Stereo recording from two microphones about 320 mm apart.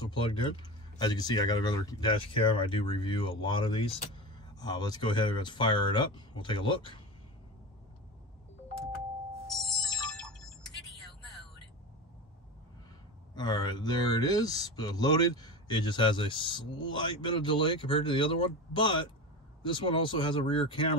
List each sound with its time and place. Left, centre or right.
0.0 s speech: centre
10.1 s ringtone: centre
13.3 s speech: centre